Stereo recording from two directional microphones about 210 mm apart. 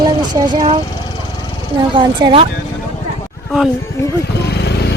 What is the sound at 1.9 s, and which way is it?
Speech, 25° right (ahead or behind).